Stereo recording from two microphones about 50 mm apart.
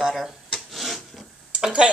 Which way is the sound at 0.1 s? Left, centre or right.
Centre.